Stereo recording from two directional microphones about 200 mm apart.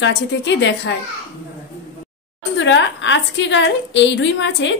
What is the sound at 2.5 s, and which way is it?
A woman's voice, 65° left (ahead or behind).